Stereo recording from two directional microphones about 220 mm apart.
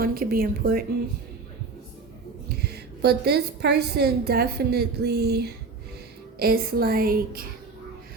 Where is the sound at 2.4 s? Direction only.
45° right (ahead or behind).